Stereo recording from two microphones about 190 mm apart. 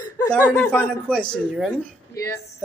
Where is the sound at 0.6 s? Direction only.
10° left (ahead or behind).